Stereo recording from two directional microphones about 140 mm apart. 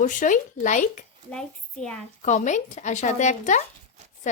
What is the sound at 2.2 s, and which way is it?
Speech, 60° left (ahead or behind).